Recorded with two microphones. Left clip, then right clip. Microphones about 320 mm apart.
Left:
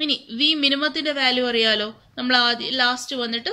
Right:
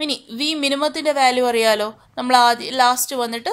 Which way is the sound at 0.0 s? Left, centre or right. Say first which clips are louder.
Left 2 dB; centre.